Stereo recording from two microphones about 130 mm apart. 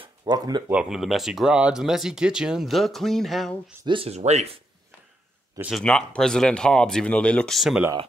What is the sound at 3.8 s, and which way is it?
Speech, 40° right (ahead or behind).